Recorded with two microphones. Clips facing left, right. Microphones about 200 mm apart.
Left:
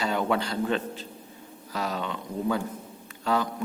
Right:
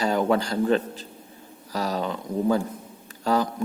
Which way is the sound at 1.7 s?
40° right (ahead or behind).